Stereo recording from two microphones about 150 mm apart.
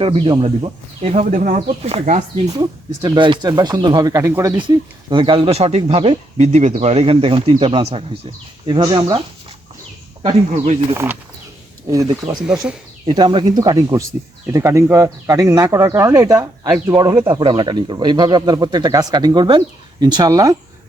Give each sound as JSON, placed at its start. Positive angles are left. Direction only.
{"t": 0.0, "sound": "speech", "side_deg": -35}
{"t": 1.2, "sound": "speech", "side_deg": -55}
{"t": 2.6, "sound": "speech", "side_deg": -30}
{"t": 5.0, "sound": "speech", "side_deg": -35}
{"t": 8.6, "sound": "speech", "side_deg": -30}
{"t": 10.9, "sound": "speech", "side_deg": -15}
{"t": 11.9, "sound": "speech", "side_deg": -25}
{"t": 12.4, "sound": "speech", "side_deg": -5}
{"t": 13.1, "sound": "speech", "side_deg": -30}